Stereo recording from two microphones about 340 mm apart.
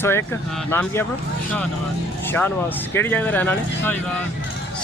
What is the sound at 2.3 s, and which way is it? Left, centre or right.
Speech, centre.